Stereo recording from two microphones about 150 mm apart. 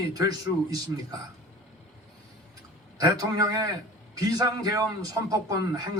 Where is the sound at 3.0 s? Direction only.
25° right (ahead or behind).